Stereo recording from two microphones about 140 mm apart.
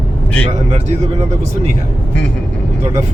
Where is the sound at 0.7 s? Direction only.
50° right (ahead or behind).